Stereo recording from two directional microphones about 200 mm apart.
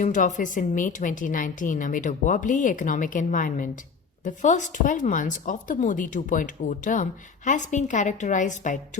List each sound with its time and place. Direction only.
0.0 s speech: 40° left (ahead or behind)